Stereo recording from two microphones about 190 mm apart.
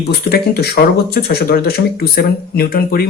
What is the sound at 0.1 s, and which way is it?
Speech, 55° left (ahead or behind).